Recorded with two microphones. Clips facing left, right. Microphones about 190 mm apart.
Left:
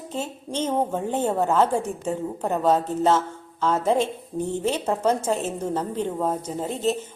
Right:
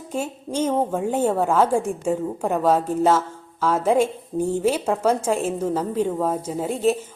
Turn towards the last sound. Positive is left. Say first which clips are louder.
# right 4 dB
turn(degrees=-10)  # may be behind; listen again after turning